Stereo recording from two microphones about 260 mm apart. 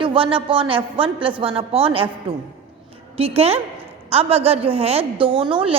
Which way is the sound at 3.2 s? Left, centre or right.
Right.